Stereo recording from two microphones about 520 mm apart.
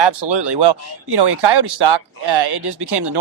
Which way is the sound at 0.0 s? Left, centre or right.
Right.